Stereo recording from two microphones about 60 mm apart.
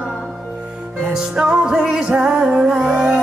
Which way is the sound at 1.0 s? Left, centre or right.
Centre.